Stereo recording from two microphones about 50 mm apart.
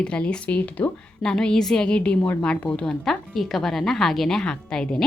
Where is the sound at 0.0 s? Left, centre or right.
Left.